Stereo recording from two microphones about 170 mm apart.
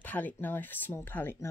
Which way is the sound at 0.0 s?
10° left (ahead or behind).